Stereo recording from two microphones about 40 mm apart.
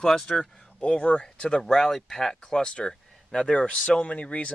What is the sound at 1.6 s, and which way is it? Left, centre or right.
Speech, centre.